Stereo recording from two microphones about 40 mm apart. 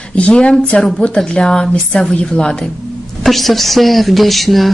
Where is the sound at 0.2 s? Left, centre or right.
Left.